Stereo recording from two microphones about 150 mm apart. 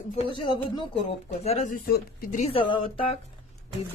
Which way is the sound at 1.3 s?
45° left (ahead or behind).